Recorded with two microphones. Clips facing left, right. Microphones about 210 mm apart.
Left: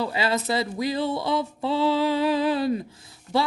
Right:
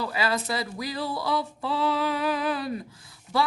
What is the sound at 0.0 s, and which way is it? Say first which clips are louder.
Speech: left 3 dB; 25° left (ahead or behind).